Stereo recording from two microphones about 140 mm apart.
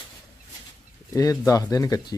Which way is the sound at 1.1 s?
25° left (ahead or behind).